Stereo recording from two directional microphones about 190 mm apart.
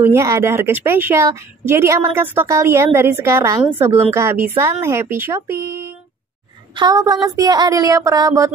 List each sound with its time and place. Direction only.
0.0 s a woman's voice: 15° right (ahead or behind)